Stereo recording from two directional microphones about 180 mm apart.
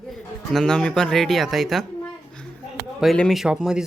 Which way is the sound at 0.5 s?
5° left (ahead or behind).